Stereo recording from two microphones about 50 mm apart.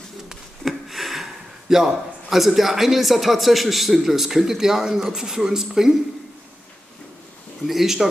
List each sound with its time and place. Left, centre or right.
0.3 s speech: centre
7.6 s speech: centre